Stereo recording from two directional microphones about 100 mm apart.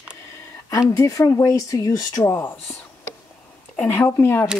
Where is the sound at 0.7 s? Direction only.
35° left (ahead or behind).